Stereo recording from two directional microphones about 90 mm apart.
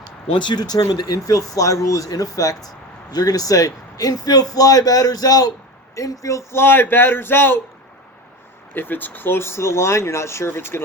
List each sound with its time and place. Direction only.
0.3 s speech: 60° left (ahead or behind); by 7.6 s 25° left (ahead or behind)
8.7 s speech: 20° left (ahead or behind)